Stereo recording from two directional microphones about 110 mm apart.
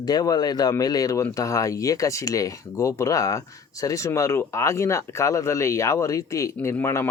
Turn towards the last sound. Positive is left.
turn(degrees=25)  # may be behind; listen again after turning